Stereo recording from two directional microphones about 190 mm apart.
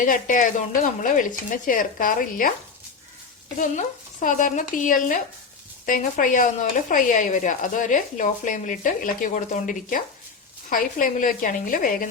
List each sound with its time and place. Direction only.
0.0 s speech: 45° left (ahead or behind)
3.6 s speech: 45° left (ahead or behind)